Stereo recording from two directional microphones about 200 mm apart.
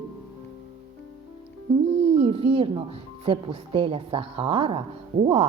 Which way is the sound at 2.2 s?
25° right (ahead or behind).